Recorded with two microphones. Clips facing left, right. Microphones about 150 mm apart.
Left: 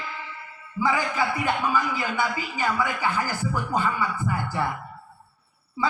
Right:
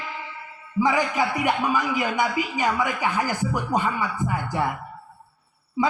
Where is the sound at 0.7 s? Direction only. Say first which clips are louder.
Right 3 dB; 15° right (ahead or behind).